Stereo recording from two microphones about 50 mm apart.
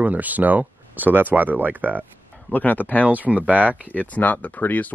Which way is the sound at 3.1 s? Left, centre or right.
Right.